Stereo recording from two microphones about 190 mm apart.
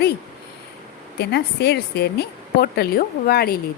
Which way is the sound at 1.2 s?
60° left (ahead or behind).